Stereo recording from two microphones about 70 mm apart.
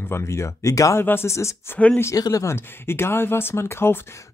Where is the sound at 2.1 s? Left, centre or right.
Left.